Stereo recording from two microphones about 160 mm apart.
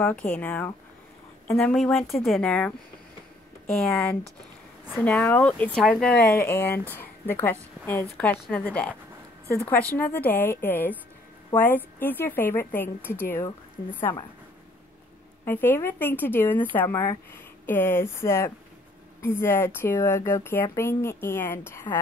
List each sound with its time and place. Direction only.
0.0 s speech: 10° left (ahead or behind)
15.4 s speech: 15° left (ahead or behind)